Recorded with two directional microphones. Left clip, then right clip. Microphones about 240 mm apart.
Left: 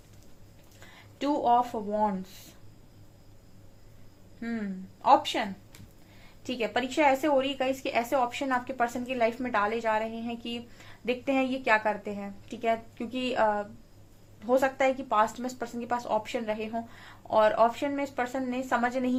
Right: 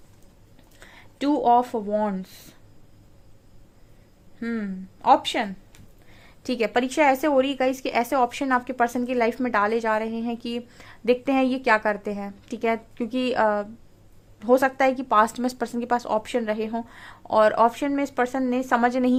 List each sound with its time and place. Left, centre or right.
0.8 s speech: right
4.4 s speech: right